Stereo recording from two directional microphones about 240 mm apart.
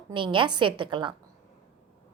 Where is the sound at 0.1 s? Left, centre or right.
Right.